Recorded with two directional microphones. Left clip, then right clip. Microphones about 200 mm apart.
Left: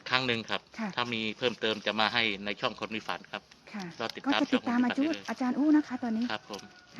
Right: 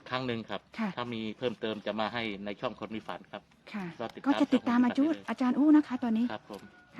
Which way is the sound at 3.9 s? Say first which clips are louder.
Even; 5° right (ahead or behind).